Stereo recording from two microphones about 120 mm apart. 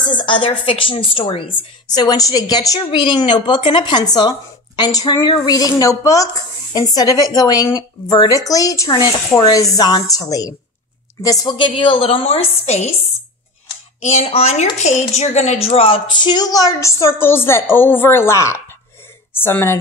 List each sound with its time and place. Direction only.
0.2 s a woman's voice: 45° left (ahead or behind)
1.9 s a woman's voice: 35° left (ahead or behind); by 12.4 s 55° left (ahead or behind)
12.6 s speech: 65° left (ahead or behind)
14.0 s a woman's voice: 65° left (ahead or behind); by 19.8 s 20° left (ahead or behind)